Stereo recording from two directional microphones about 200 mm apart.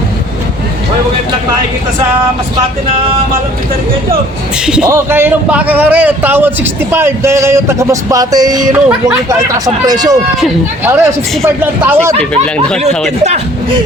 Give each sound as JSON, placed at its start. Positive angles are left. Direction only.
{"t": 4.6, "sound": "a man's voice", "side_deg": -5}
{"t": 8.7, "sound": "speech", "side_deg": -5}
{"t": 9.6, "sound": "a man's voice", "side_deg": -20}